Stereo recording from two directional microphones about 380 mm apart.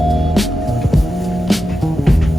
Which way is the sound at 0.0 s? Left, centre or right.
Centre.